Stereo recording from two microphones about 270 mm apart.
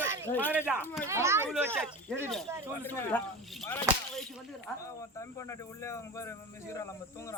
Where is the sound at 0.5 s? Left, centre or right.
Centre.